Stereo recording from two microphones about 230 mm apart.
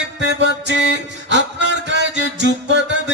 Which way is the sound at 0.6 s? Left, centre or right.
Right.